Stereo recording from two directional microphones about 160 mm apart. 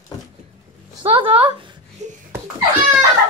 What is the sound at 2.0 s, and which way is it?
Laughter, 45° right (ahead or behind).